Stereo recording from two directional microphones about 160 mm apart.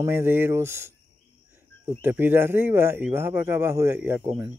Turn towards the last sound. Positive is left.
turn(degrees=-15)  # may be behind; listen again after turning